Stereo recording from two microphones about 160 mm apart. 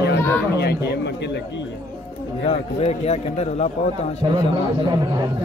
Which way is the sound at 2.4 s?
40° left (ahead or behind).